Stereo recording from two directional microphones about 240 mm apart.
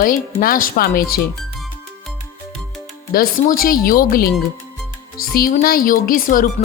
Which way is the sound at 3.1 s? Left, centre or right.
Left.